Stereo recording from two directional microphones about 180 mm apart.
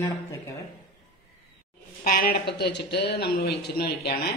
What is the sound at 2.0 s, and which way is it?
A man's voice, 55° left (ahead or behind).